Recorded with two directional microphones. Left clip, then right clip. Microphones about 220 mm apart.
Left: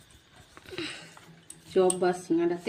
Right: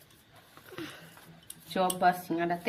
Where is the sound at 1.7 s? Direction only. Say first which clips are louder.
Left 2 dB; 50° right (ahead or behind).